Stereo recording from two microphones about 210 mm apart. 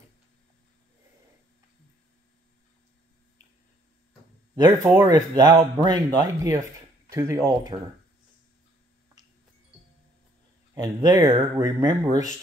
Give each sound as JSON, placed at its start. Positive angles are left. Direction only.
{"t": 4.6, "sound": "speech", "side_deg": -15}
{"t": 10.7, "sound": "speech", "side_deg": -15}